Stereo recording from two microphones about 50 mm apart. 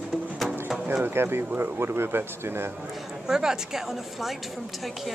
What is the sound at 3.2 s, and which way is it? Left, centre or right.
A woman's voice, centre.